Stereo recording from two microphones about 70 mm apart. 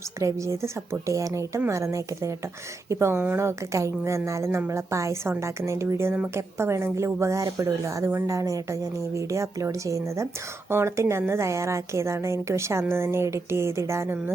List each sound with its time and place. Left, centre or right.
0.2 s speech: right
2.9 s music: right
3.3 s speech: right
6.3 s music: right
7.6 s speech: right
10.7 s speech: right
12.9 s music: right